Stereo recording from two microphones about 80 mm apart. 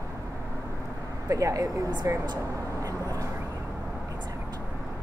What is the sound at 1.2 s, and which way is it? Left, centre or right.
Speech, right.